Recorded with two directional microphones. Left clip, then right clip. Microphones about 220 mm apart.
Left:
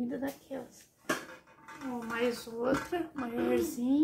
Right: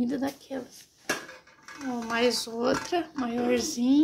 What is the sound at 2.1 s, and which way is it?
Speech, 50° right (ahead or behind).